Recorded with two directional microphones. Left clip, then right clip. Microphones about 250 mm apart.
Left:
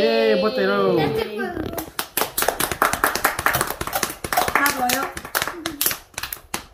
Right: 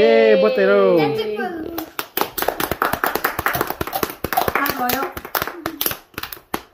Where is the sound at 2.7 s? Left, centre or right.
Right.